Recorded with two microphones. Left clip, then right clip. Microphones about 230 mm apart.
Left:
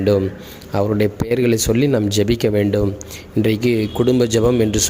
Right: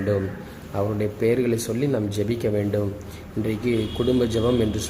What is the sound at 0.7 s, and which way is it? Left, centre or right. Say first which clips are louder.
Speech: left 8 dB; left.